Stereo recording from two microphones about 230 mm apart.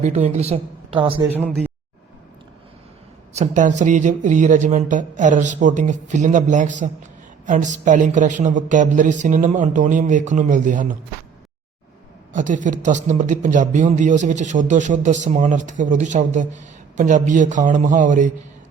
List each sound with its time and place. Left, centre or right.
0.0 s a woman's voice: right
1.4 s a man's voice: centre
3.3 s a man's voice: right
12.3 s a man's voice: right